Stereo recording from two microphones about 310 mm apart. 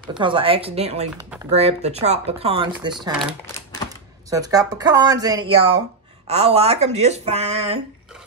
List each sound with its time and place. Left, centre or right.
0.2 s speech: centre
2.7 s speech: centre